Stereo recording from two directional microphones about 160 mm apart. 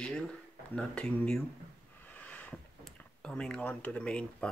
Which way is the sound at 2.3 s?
10° left (ahead or behind).